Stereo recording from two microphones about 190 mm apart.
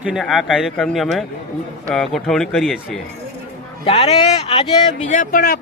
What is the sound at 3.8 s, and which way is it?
Speech, 30° left (ahead or behind).